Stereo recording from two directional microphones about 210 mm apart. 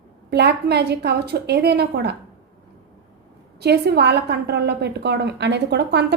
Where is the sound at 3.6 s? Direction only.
50° right (ahead or behind).